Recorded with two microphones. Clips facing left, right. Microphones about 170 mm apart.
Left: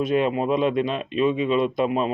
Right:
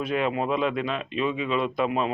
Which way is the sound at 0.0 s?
25° left (ahead or behind).